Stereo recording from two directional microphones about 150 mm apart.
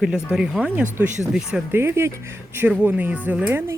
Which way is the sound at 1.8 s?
15° right (ahead or behind).